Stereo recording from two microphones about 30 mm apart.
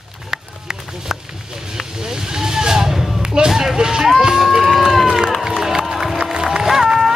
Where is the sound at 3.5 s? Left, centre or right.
Centre.